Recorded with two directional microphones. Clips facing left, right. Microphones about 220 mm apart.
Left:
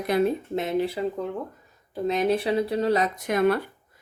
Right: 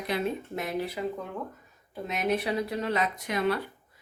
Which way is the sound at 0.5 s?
25° left (ahead or behind).